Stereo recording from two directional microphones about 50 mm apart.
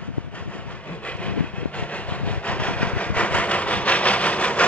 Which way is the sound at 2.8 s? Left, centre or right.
Left.